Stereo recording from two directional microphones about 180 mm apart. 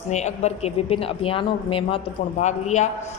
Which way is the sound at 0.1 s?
40° left (ahead or behind).